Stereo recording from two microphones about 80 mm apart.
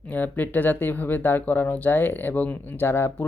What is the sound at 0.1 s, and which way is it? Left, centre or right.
Speech, left.